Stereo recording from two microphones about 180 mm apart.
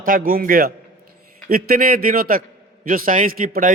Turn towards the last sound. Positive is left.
turn(degrees=-50)  # may be behind; listen again after turning